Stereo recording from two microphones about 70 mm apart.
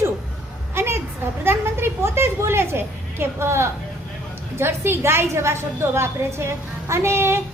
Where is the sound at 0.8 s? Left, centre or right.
Right.